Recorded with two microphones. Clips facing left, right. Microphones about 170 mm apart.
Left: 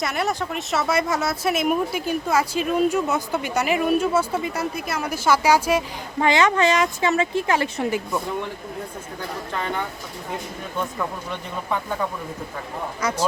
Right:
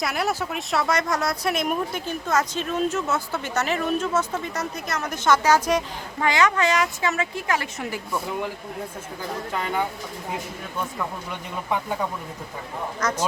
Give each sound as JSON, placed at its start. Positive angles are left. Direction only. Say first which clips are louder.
{"t": 0.0, "sound": "speech", "louder": "left 1 dB", "side_deg": 0}
{"t": 6.1, "sound": "speech", "louder": "left 3 dB", "side_deg": 25}
{"t": 9.5, "sound": "speech", "louder": "right 1 dB", "side_deg": -5}
{"t": 11.7, "sound": "speech", "louder": "even", "side_deg": -15}
{"t": 13.0, "sound": "speech", "louder": "left 1 dB", "side_deg": 10}